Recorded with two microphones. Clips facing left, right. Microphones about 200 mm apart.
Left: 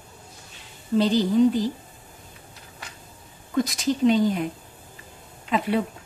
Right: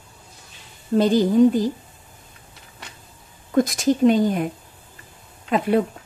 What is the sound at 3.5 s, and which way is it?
Speech, 50° right (ahead or behind).